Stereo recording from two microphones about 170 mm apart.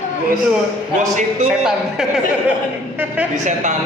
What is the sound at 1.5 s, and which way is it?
Speech, 5° right (ahead or behind).